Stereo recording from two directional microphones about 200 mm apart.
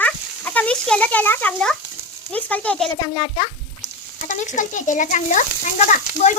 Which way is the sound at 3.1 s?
35° left (ahead or behind).